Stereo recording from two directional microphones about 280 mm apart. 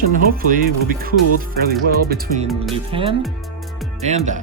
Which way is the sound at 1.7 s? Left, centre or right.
Right.